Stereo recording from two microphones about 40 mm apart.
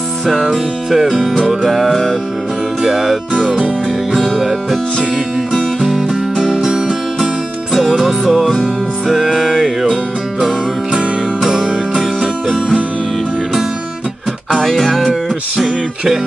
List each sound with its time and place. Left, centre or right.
0.3 s music: centre
2.8 s speech: centre
4.1 s music: centre
5.8 s music: centre
6.3 s music: centre
7.7 s music: centre
10.9 s music: centre
14.5 s music: centre